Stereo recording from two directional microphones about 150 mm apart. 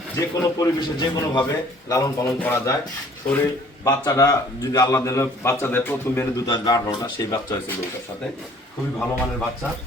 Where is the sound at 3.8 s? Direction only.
25° left (ahead or behind).